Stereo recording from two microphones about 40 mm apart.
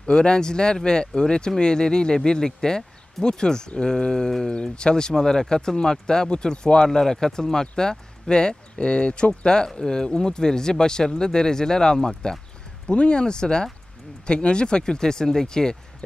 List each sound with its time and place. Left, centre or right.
0.0 s speech: left
12.8 s speech: left